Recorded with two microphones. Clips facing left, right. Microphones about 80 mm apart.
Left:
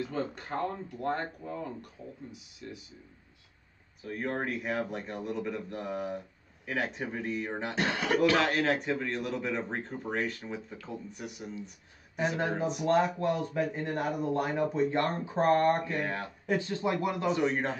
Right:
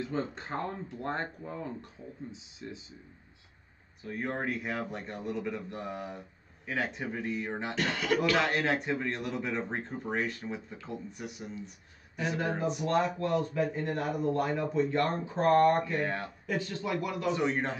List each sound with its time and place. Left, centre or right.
0.0 s speech: right
4.0 s a man's voice: centre
7.7 s speech: left
8.4 s a man's voice: centre
12.2 s speech: left
16.0 s a man's voice: centre
16.4 s speech: left
17.4 s a man's voice: centre